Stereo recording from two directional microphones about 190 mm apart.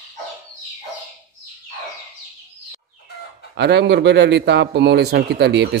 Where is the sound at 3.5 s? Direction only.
60° right (ahead or behind).